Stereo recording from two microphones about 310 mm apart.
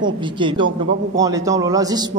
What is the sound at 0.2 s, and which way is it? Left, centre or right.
A man's voice, centre.